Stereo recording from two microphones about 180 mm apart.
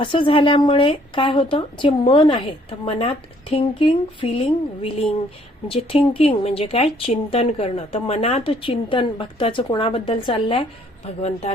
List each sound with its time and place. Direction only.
0.0 s a woman's voice: 30° left (ahead or behind)